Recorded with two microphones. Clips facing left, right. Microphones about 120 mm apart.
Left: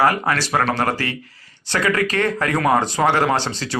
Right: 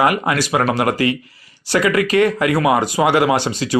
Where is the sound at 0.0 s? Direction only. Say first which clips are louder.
Right 2 dB; 15° right (ahead or behind).